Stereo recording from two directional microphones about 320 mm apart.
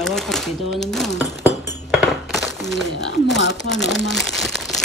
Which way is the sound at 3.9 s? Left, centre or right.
Centre.